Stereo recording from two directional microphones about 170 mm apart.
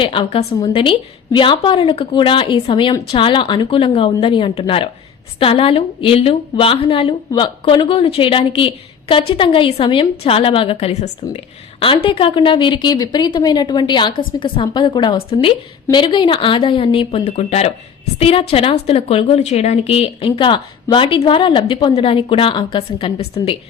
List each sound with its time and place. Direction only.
0.0 s a woman's voice: 30° left (ahead or behind)